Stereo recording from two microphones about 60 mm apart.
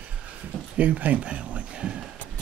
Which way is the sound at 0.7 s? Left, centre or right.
Right.